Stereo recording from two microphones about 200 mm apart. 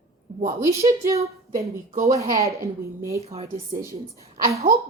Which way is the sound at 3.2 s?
30° right (ahead or behind).